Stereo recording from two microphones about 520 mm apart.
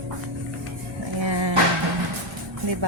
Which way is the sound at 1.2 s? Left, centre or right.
Right.